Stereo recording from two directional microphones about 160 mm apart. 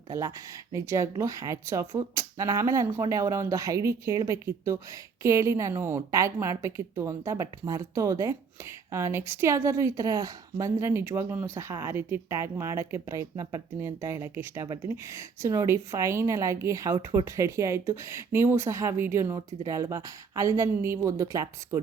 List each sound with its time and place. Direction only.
0.1 s a woman's voice: 20° right (ahead or behind)